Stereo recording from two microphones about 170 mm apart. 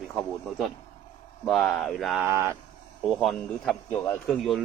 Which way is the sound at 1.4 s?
Centre (ahead or behind).